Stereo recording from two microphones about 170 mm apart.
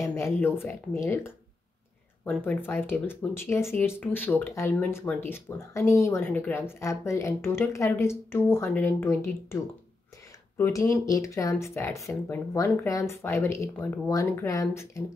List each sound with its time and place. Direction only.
0.0 s speech: 15° left (ahead or behind)
10.6 s speech: 20° left (ahead or behind)